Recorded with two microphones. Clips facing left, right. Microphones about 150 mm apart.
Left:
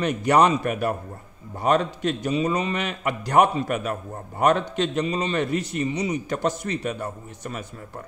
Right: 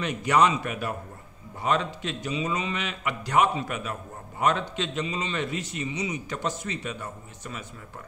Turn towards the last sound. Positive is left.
turn(degrees=45)  # may be behind; listen again after turning